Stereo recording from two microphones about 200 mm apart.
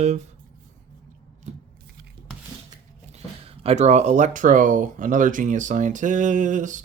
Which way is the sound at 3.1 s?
30° right (ahead or behind).